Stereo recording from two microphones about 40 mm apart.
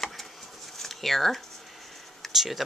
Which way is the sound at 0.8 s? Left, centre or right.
Centre.